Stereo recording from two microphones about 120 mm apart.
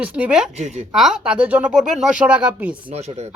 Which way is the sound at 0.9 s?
5° right (ahead or behind).